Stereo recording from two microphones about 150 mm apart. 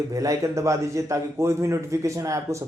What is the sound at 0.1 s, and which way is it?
A man's voice, 20° right (ahead or behind).